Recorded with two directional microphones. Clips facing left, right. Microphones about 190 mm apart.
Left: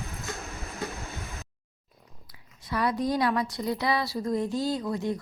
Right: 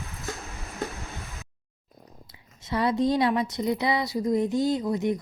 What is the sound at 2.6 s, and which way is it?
A woman's voice, 25° right (ahead or behind).